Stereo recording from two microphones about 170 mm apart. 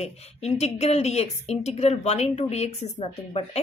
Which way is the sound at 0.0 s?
40° left (ahead or behind).